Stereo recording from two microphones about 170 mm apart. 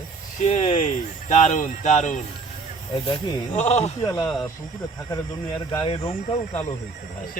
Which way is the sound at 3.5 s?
40° left (ahead or behind).